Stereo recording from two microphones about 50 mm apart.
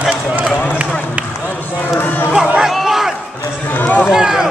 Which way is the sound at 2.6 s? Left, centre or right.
Centre.